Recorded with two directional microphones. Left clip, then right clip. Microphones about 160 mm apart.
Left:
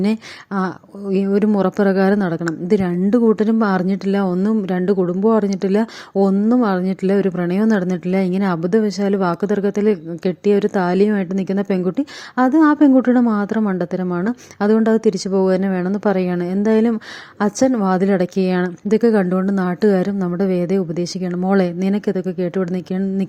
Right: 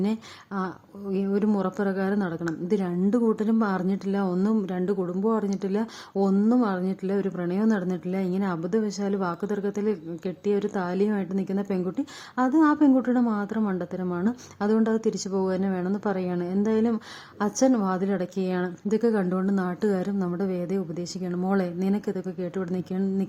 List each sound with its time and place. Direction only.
0.0 s speech: 35° left (ahead or behind)